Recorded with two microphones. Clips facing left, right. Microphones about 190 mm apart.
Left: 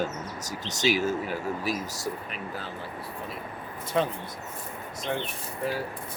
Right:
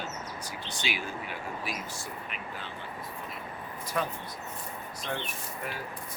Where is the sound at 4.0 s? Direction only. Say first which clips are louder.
Left 6 dB; 25° left (ahead or behind).